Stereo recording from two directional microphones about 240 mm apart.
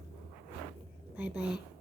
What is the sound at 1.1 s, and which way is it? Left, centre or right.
Speech, centre.